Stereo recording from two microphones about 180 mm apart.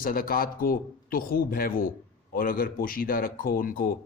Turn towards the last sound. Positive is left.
turn(degrees=50)  # may be behind; listen again after turning